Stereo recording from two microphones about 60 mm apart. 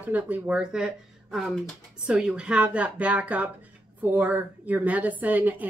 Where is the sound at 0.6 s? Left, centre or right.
Centre.